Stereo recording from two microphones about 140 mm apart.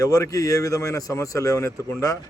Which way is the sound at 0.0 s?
25° left (ahead or behind).